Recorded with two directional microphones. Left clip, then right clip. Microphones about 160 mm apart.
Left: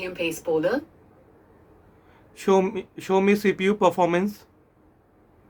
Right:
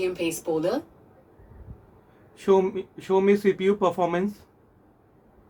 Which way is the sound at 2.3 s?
50° left (ahead or behind).